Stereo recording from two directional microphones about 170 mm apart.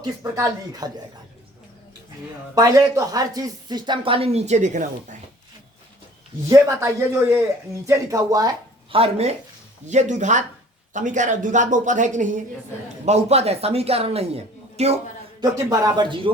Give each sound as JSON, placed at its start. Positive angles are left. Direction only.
{"t": 0.0, "sound": "speech", "side_deg": -20}
{"t": 2.6, "sound": "speech", "side_deg": -20}
{"t": 6.5, "sound": "speech", "side_deg": -15}
{"t": 9.0, "sound": "speech", "side_deg": -40}
{"t": 15.4, "sound": "speech", "side_deg": -20}